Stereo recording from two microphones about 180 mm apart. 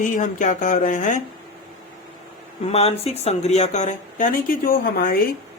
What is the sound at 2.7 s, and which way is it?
Speech, 35° left (ahead or behind).